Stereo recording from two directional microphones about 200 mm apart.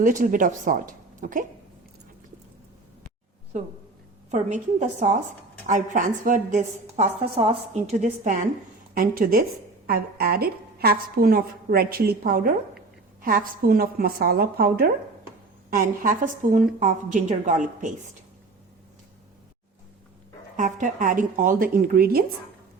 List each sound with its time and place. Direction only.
0.0 s a woman's voice: 40° right (ahead or behind)
3.5 s a woman's voice: 35° right (ahead or behind)
20.6 s a woman's voice: 40° right (ahead or behind)